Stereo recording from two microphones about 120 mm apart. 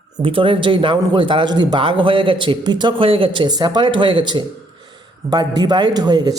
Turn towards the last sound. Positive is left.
turn(degrees=-35)  # may be behind; listen again after turning